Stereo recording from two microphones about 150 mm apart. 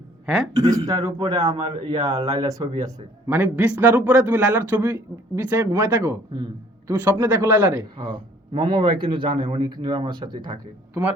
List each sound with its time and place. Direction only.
0.5 s speech: 25° right (ahead or behind)
3.2 s a man's voice: 10° right (ahead or behind)
7.9 s a man's voice: 35° right (ahead or behind)